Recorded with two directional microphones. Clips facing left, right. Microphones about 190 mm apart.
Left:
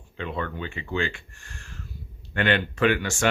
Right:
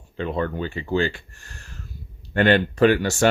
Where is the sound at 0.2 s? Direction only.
35° right (ahead or behind).